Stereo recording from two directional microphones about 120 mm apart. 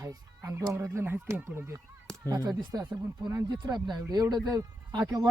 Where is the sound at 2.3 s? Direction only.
30° right (ahead or behind).